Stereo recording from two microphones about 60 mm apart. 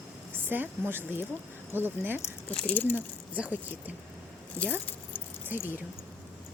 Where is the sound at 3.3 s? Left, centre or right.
Right.